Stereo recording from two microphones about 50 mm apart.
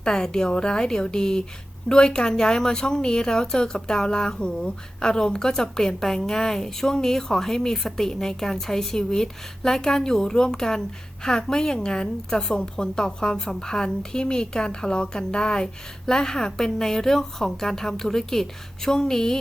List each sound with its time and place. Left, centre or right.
0.0 s a woman's voice: centre